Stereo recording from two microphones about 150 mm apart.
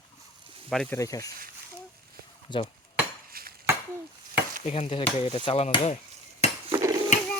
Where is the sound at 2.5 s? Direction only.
30° left (ahead or behind).